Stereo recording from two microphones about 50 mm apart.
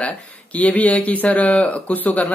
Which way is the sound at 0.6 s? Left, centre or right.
Left.